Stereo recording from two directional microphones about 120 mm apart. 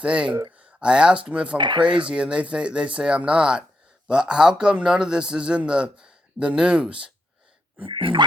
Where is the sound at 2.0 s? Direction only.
10° right (ahead or behind).